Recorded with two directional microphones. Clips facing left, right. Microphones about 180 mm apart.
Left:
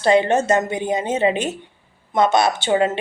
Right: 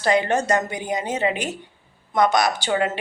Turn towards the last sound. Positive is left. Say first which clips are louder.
# left 4 dB
turn(degrees=25)  # may be behind; listen again after turning